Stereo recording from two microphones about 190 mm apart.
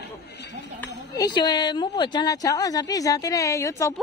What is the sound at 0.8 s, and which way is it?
Speech, 20° left (ahead or behind).